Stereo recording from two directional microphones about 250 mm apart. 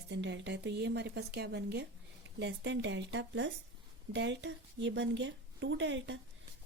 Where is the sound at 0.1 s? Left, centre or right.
Right.